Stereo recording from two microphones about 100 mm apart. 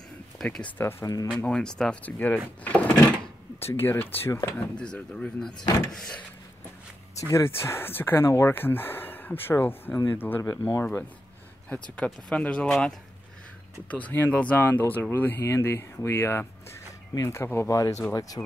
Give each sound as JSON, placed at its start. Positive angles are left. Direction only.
{"t": 0.4, "sound": "speech", "side_deg": 5}
{"t": 0.7, "sound": "speech", "side_deg": 25}
{"t": 1.0, "sound": "speech", "side_deg": 35}
{"t": 1.4, "sound": "speech", "side_deg": 10}
{"t": 4.3, "sound": "speech", "side_deg": 30}
{"t": 4.7, "sound": "speech", "side_deg": 10}
{"t": 5.9, "sound": "vehicle", "side_deg": 5}
{"t": 7.2, "sound": "speech", "side_deg": 30}
{"t": 12.0, "sound": "speech", "side_deg": 10}